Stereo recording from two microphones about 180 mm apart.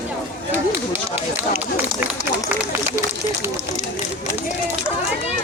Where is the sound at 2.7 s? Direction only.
15° right (ahead or behind).